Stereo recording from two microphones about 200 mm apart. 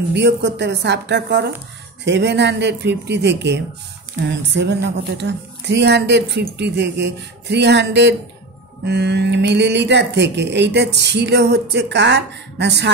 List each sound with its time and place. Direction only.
0.1 s speech: 60° right (ahead or behind)